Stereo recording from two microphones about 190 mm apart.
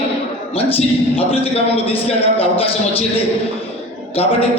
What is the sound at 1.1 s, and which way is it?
Speech, 30° left (ahead or behind).